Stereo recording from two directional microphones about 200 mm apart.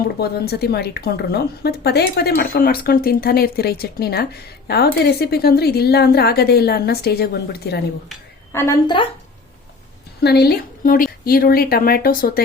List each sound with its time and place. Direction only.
0.2 s a woman's voice: 50° left (ahead or behind)
8.5 s a woman's voice: 15° left (ahead or behind)
10.2 s a woman's voice: 55° left (ahead or behind)